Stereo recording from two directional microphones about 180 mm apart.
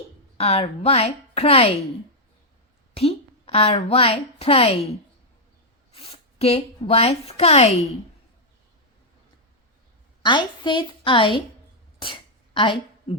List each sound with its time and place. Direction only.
0.3 s a woman's voice: 35° left (ahead or behind)
2.9 s a woman's voice: 30° left (ahead or behind)
5.9 s speech: 35° left (ahead or behind)
10.2 s a woman's voice: 25° left (ahead or behind)
11.9 s a sound: 30° left (ahead or behind)